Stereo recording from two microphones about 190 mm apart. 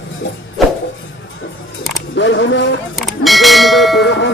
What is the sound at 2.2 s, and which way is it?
Speech, 75° left (ahead or behind).